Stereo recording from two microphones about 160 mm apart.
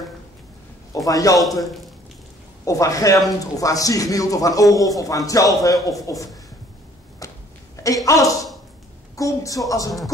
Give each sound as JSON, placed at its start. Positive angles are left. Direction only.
{"t": 1.0, "sound": "speech", "side_deg": 20}
{"t": 2.6, "sound": "speech", "side_deg": 20}
{"t": 7.2, "sound": "a sound", "side_deg": 20}
{"t": 7.7, "sound": "a woman's voice", "side_deg": 20}